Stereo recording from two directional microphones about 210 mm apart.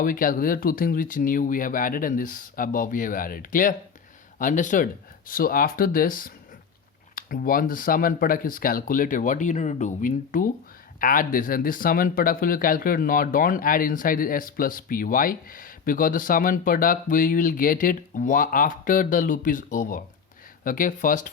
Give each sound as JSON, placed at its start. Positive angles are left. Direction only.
{"t": 0.0, "sound": "speech", "side_deg": 40}